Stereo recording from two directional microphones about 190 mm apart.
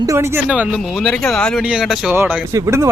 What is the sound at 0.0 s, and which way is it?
Speech, 15° right (ahead or behind).